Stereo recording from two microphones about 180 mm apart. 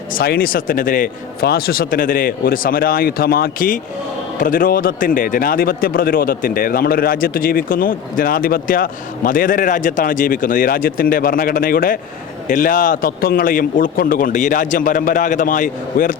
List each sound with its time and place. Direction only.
0.1 s a man's voice: 55° left (ahead or behind)